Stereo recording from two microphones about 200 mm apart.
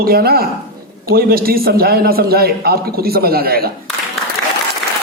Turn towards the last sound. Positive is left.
turn(degrees=-50)  # may be behind; listen again after turning